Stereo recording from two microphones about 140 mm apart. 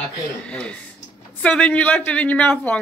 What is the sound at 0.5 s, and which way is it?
Speech, 10° left (ahead or behind).